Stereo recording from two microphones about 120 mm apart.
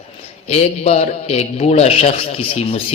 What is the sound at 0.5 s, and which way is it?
A man's voice, 65° left (ahead or behind).